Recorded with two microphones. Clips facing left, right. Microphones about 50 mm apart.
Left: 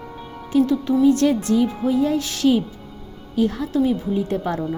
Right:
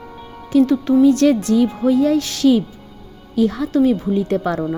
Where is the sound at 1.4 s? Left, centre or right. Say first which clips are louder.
Right 4 dB; right.